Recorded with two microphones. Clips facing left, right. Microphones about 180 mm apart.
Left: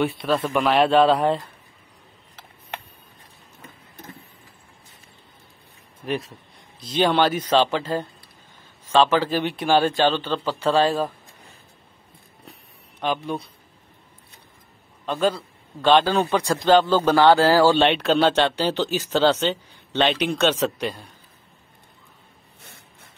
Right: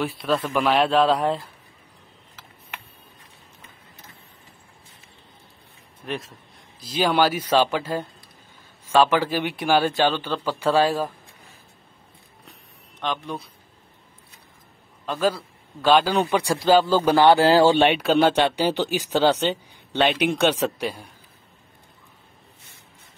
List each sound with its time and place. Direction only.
0.0 s a man's voice: centre (ahead or behind)
6.0 s a man's voice: centre (ahead or behind)
13.0 s a man's voice: 5° left (ahead or behind)
15.0 s a man's voice: 5° right (ahead or behind)